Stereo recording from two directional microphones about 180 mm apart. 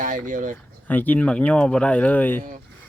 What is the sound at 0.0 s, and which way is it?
Speech, 45° right (ahead or behind).